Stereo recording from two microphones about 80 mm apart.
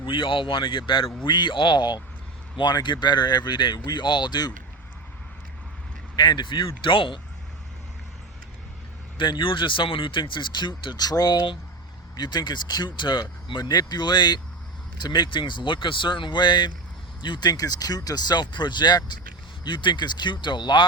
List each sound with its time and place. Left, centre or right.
0.0 s speech: left
6.1 s speech: left
9.1 s speech: left
19.6 s speech: left